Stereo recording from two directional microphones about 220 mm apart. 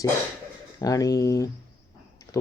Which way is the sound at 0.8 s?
15° left (ahead or behind).